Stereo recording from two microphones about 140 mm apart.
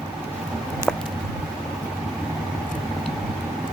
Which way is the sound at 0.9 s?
5° left (ahead or behind).